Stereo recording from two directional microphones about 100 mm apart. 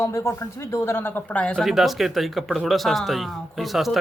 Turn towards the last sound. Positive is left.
turn(degrees=0)  # may be behind; listen again after turning